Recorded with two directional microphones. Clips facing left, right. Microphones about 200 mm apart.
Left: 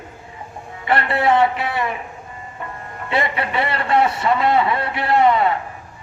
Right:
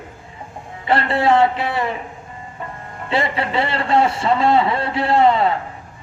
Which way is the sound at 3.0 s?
25° right (ahead or behind).